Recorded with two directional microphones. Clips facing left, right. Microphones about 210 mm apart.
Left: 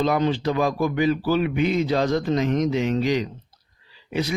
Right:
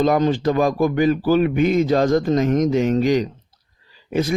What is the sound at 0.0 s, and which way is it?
Speech, 50° right (ahead or behind).